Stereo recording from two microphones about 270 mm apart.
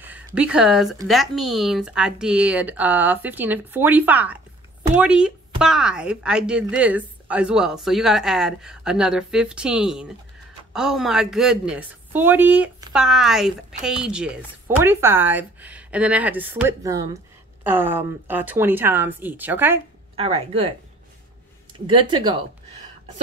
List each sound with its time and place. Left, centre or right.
0.0 s a woman's voice: centre
20.2 s speech: right